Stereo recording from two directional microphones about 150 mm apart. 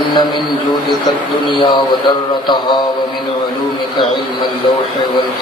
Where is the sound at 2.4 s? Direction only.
30° left (ahead or behind).